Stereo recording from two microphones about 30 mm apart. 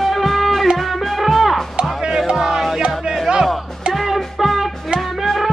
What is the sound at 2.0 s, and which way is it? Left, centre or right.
Music, centre.